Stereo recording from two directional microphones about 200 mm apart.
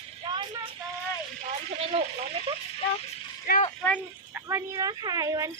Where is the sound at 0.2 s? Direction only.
25° right (ahead or behind).